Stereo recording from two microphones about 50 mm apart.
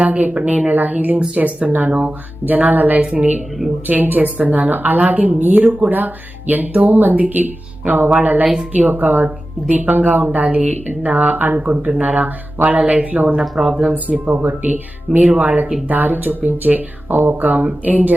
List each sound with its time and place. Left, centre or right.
0.0 s a woman's voice: right
2.5 s a woman's voice: right
3.8 s a woman's voice: right
13.4 s speech: centre
13.9 s a woman's voice: right